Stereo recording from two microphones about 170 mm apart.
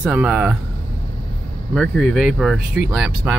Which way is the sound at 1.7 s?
Centre (ahead or behind).